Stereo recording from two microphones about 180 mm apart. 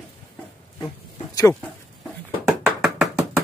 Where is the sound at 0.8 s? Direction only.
20° left (ahead or behind).